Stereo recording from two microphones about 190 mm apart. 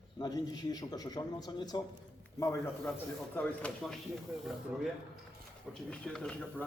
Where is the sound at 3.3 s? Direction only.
5° left (ahead or behind).